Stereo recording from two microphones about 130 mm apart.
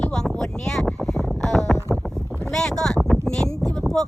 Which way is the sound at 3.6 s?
25° right (ahead or behind).